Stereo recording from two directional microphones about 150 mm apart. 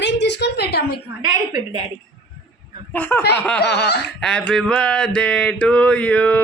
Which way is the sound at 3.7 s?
90° left.